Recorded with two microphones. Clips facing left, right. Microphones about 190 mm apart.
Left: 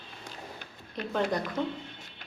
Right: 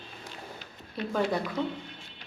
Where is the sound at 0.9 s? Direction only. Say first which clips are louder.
Right 1 dB; 5° right (ahead or behind).